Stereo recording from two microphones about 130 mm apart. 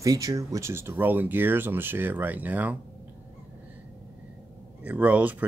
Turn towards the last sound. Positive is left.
turn(degrees=-10)  # may be behind; listen again after turning